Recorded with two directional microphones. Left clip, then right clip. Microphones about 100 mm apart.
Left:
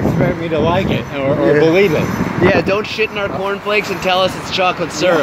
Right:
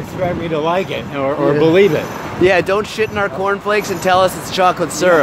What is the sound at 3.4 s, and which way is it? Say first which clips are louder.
Speech: even; 35° right (ahead or behind).